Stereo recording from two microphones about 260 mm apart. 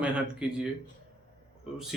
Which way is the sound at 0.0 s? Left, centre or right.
Centre.